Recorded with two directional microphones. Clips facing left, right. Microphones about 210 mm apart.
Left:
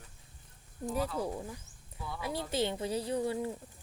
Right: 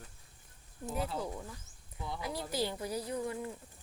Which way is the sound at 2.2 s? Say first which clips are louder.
Left 3 dB; 25° left (ahead or behind).